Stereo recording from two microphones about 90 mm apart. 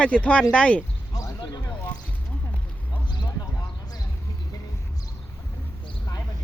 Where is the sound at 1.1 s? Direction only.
40° left (ahead or behind).